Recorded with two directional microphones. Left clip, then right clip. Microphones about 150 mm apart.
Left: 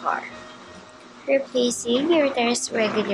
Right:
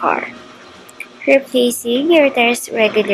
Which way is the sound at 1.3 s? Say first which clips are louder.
Right 8 dB; 10° right (ahead or behind).